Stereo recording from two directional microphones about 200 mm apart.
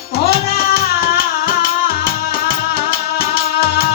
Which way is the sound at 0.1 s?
50° left (ahead or behind).